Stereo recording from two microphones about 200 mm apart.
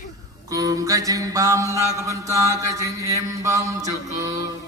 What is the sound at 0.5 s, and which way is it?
Mantra, 15° right (ahead or behind).